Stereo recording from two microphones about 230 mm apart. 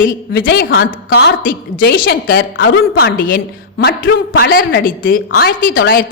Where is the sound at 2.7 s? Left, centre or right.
Left.